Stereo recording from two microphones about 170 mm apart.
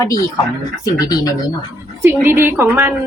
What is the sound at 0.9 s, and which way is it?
Speech, 20° left (ahead or behind).